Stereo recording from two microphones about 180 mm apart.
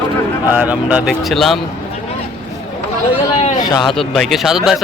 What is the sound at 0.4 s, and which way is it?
Speech, 10° right (ahead or behind).